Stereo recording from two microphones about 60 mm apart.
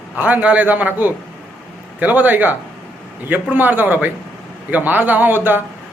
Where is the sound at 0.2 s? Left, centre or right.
Right.